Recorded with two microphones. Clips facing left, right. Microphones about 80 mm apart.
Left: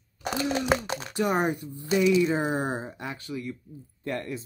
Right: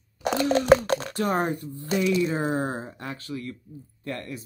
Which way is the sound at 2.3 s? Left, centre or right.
Centre.